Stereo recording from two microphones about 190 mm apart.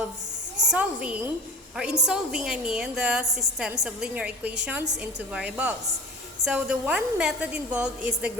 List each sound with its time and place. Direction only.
0.7 s a woman's voice: 5° right (ahead or behind)